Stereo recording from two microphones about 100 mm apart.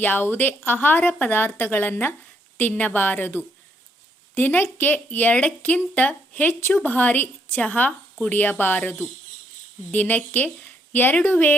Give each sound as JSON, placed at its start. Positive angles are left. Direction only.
{"t": 0.0, "sound": "speech", "side_deg": 20}